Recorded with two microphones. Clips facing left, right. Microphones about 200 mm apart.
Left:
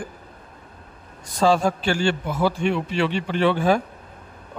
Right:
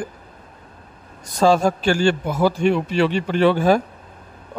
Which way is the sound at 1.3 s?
40° right (ahead or behind).